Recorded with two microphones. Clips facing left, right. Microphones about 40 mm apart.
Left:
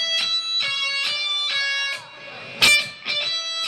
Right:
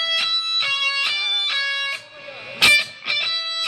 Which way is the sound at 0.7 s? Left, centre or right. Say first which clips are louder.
Right 3 dB; centre.